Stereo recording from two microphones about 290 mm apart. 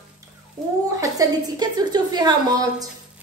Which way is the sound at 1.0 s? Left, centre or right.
Centre.